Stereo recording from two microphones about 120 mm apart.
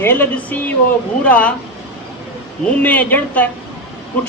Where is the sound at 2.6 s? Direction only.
15° left (ahead or behind).